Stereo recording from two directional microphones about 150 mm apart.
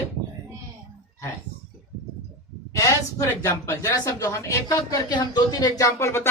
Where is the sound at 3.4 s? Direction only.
15° left (ahead or behind).